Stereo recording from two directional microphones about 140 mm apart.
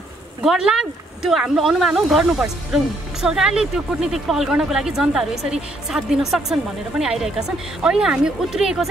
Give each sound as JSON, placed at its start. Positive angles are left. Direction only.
{"t": 0.4, "sound": "speech", "side_deg": -5}